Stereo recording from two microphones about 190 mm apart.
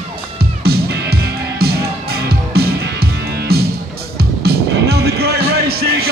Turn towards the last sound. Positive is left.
turn(degrees=-55)  # may be behind; listen again after turning